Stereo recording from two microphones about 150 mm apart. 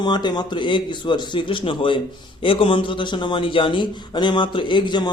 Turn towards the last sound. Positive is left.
turn(degrees=30)  # may be behind; listen again after turning